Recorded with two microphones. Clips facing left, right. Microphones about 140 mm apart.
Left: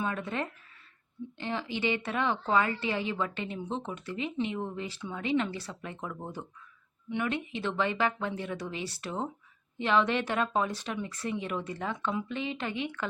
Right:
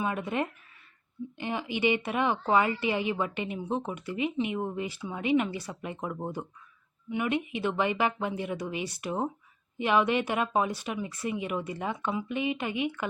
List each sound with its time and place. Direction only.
0.0 s a woman's voice: 15° right (ahead or behind)